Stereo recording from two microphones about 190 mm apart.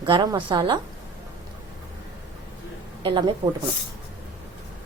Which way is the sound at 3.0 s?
25° right (ahead or behind).